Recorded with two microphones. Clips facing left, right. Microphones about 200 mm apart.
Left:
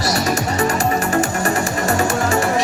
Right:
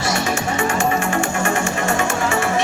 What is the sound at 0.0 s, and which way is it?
Music, 40° left (ahead or behind).